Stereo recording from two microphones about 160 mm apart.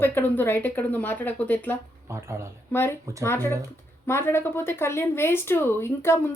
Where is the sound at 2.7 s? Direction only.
15° left (ahead or behind).